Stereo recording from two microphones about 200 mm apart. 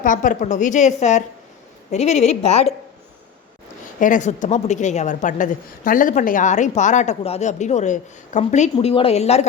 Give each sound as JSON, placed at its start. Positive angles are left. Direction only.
{"t": 0.0, "sound": "a woman's voice", "side_deg": 40}
{"t": 4.0, "sound": "a woman's voice", "side_deg": 40}